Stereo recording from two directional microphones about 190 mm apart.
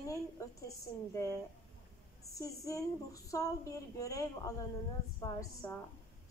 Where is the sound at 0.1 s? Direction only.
15° left (ahead or behind).